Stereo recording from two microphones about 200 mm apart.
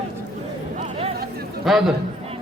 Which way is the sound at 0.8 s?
30° right (ahead or behind).